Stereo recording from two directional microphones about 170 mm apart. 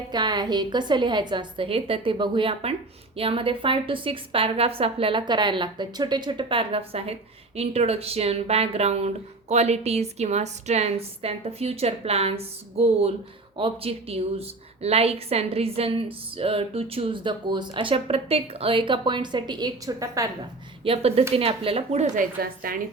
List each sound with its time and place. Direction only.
0.1 s a woman's voice: 25° right (ahead or behind)
20.8 s a woman's voice: 35° right (ahead or behind)
22.1 s a woman's voice: 55° right (ahead or behind)